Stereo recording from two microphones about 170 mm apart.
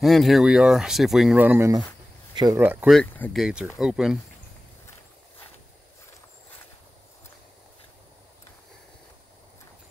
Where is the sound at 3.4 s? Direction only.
5° right (ahead or behind).